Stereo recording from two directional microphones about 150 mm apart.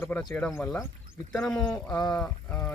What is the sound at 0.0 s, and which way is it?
Speech, 10° left (ahead or behind).